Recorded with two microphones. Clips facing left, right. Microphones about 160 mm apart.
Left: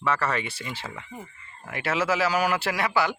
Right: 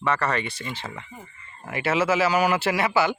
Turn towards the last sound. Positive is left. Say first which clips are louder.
# right 3 dB
turn(degrees=0)  # may be behind; listen again after turning